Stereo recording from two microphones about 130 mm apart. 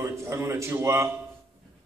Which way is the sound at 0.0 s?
20° right (ahead or behind).